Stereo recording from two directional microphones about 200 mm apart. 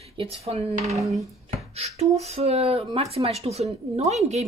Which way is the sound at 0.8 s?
Centre (ahead or behind).